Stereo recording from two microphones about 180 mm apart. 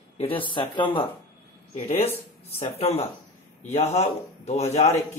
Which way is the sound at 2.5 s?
35° left (ahead or behind).